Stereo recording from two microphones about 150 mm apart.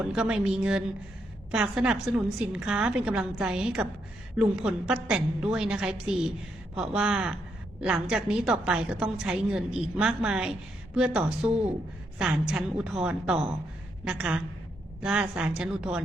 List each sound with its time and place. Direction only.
0.0 s a woman's voice: 5° right (ahead or behind)